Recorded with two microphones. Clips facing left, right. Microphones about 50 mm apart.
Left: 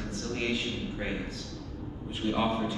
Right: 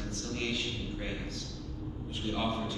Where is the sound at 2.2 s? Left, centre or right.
Centre.